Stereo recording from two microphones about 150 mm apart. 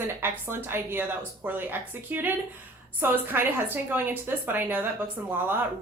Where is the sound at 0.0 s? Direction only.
15° right (ahead or behind).